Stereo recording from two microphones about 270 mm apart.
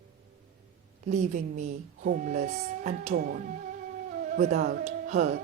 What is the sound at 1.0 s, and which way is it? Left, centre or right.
Speech, right.